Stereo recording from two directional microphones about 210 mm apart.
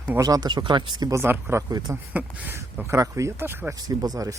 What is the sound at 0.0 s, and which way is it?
Speech, 10° right (ahead or behind).